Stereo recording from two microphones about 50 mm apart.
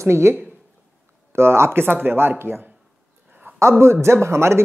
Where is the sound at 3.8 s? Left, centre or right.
Right.